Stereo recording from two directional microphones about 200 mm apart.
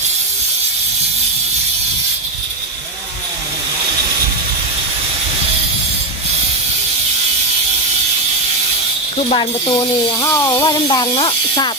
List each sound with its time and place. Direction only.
9.3 s speech: 25° left (ahead or behind)